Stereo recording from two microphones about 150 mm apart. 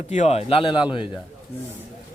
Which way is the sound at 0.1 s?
50° left (ahead or behind).